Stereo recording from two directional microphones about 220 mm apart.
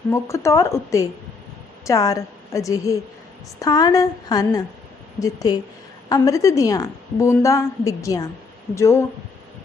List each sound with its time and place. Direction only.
0.1 s a woman's voice: 15° left (ahead or behind)